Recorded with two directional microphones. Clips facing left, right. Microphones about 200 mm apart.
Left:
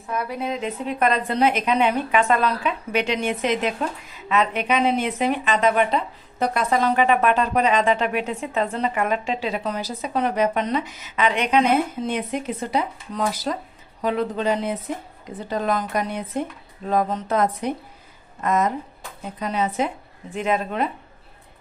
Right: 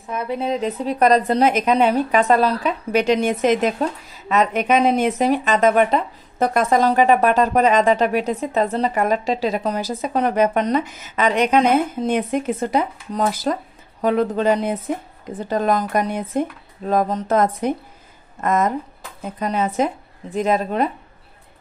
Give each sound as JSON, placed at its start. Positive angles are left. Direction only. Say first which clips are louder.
{"t": 0.1, "sound": "a woman's voice", "louder": "right 4 dB", "side_deg": -25}